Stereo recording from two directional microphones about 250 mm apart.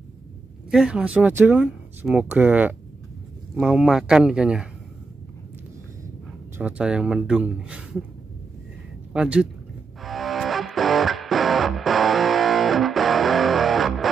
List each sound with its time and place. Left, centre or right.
0.7 s speech: centre
6.6 s speech: centre
9.1 s speech: centre
10.0 s music: centre